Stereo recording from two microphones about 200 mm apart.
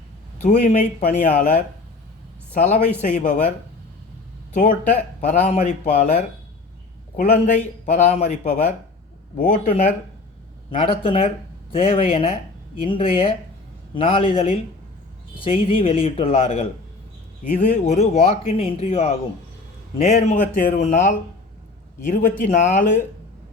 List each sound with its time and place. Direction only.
0.4 s a woman's voice: 35° left (ahead or behind)
4.5 s speech: 35° left (ahead or behind)
10.7 s speech: 25° left (ahead or behind)